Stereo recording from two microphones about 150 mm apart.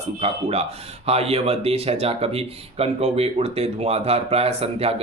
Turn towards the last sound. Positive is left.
turn(degrees=-40)  # may be behind; listen again after turning